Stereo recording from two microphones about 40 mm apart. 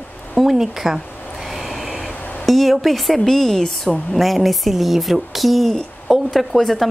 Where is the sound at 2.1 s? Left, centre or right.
Left.